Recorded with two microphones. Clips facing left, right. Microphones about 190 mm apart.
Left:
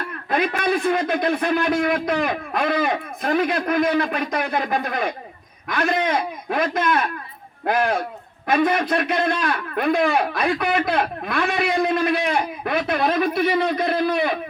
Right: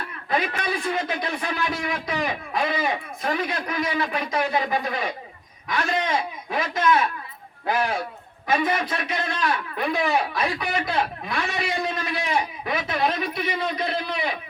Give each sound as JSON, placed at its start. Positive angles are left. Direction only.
{"t": 0.0, "sound": "a man's voice", "side_deg": 55}
{"t": 8.4, "sound": "a man's voice", "side_deg": 55}